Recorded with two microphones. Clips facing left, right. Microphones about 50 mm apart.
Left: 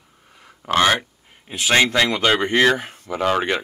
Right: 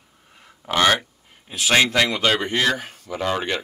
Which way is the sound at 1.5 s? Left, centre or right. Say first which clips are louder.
Left 1 dB; centre.